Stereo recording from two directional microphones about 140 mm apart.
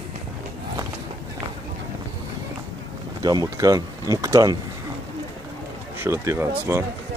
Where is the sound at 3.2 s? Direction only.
25° right (ahead or behind).